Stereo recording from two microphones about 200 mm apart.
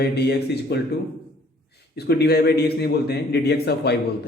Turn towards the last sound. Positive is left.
turn(degrees=55)  # may be behind; listen again after turning